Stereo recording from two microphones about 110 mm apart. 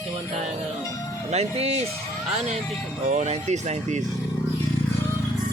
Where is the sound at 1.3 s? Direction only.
70° right (ahead or behind).